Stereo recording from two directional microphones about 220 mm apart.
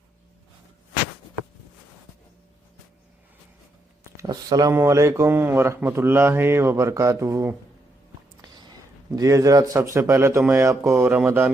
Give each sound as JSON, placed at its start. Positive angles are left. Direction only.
{"t": 4.2, "sound": "speech", "side_deg": -15}
{"t": 8.4, "sound": "a sound", "side_deg": -20}
{"t": 9.9, "sound": "speech", "side_deg": -10}